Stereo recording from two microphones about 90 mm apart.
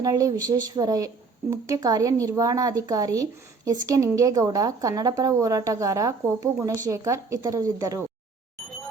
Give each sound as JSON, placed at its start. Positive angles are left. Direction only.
{"t": 0.0, "sound": "speech", "side_deg": -40}